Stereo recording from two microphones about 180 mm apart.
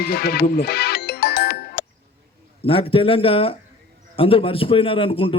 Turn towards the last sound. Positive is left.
turn(degrees=30)  # may be behind; listen again after turning